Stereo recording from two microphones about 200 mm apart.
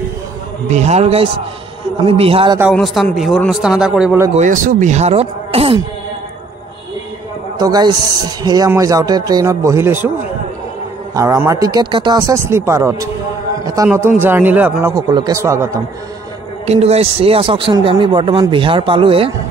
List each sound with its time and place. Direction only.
0.7 s speech: 35° right (ahead or behind)
2.7 s a man's voice: centre (ahead or behind)
4.4 s speech: 40° right (ahead or behind)
7.5 s speech: 20° right (ahead or behind)
11.1 s speech: 15° right (ahead or behind)
16.6 s speech: 30° right (ahead or behind)